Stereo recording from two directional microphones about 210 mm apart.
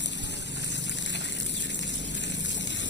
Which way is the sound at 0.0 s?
55° left (ahead or behind).